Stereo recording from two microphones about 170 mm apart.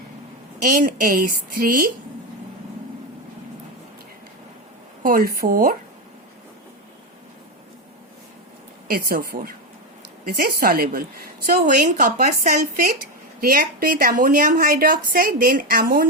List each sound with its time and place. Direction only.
0.6 s a woman's voice: 50° right (ahead or behind)
5.0 s a woman's voice: 60° right (ahead or behind)
8.9 s a woman's voice: 60° right (ahead or behind)
11.4 s a woman's voice: 50° right (ahead or behind)